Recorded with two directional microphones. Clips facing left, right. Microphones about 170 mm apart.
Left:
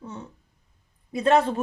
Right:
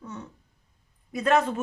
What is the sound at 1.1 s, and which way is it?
Speech, 30° left (ahead or behind).